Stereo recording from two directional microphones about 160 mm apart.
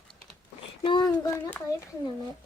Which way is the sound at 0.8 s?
30° left (ahead or behind).